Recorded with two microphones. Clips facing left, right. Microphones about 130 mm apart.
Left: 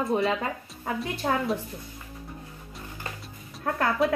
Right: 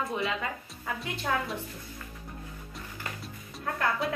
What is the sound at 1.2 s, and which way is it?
Speech, 40° left (ahead or behind).